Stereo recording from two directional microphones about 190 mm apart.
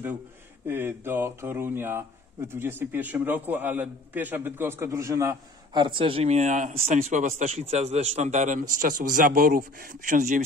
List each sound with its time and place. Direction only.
0.7 s speech: 10° right (ahead or behind); by 10.4 s 45° right (ahead or behind)